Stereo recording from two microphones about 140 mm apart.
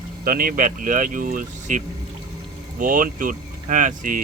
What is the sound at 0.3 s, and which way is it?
Speech, 90° right.